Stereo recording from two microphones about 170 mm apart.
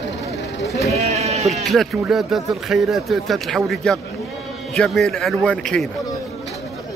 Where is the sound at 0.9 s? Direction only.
40° right (ahead or behind).